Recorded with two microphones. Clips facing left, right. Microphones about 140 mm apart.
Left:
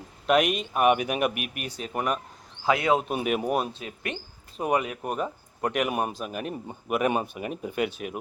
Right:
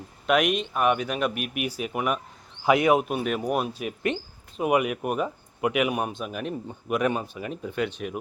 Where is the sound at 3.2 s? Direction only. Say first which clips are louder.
Left 1 dB; 10° left (ahead or behind).